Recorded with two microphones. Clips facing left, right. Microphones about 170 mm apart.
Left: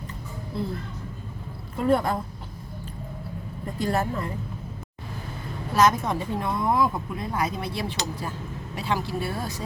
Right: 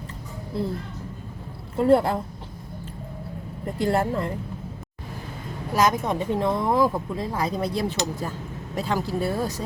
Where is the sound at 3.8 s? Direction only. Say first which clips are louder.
Right 3 dB; 25° right (ahead or behind).